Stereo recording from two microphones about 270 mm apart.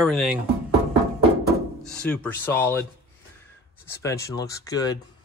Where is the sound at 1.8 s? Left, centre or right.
Centre.